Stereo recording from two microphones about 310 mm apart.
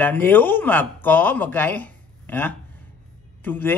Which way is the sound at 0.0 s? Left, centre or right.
Centre.